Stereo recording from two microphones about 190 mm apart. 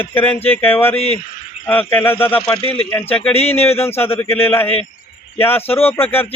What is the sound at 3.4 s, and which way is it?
Speech, 30° left (ahead or behind).